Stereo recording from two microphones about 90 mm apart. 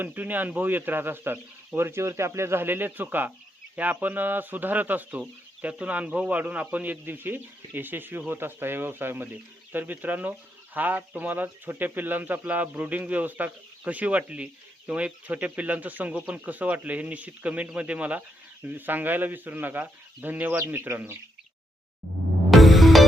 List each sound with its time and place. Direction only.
0.0 s a man's voice: 20° right (ahead or behind)
22.4 s music: centre (ahead or behind)